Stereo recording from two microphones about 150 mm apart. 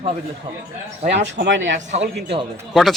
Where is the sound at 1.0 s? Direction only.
60° right (ahead or behind).